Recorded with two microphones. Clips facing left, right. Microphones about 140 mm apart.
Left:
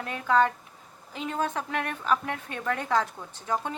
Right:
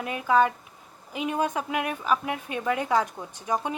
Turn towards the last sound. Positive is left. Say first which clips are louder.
# right 2 dB
turn(degrees=-15)  # may be behind; listen again after turning